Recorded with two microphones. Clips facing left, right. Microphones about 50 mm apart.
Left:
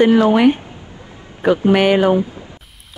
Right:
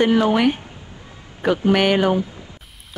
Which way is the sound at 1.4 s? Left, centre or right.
Centre.